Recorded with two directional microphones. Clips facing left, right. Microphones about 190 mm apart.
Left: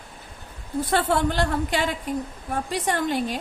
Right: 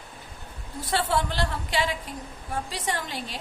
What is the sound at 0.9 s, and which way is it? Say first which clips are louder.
A woman's voice: left 3 dB; 55° left (ahead or behind).